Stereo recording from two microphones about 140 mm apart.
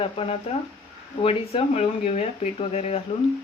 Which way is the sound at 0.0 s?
45° left (ahead or behind).